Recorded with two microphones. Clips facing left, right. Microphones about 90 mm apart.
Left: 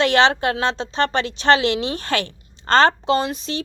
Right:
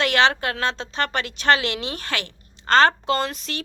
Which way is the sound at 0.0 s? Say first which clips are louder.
Left 3 dB; 30° left (ahead or behind).